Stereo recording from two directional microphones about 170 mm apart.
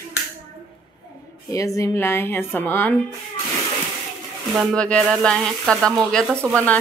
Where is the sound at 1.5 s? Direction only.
20° left (ahead or behind).